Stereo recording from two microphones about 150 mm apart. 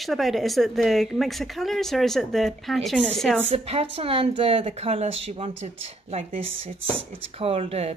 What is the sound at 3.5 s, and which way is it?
Speech, 40° right (ahead or behind).